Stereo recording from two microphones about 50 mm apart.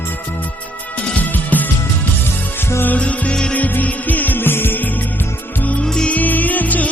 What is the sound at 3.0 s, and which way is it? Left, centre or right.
Music, left.